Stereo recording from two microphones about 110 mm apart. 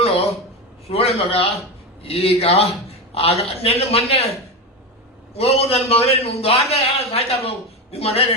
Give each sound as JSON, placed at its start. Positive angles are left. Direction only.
{"t": 0.9, "sound": "a man's voice", "side_deg": 65}
{"t": 5.4, "sound": "a man's voice", "side_deg": 65}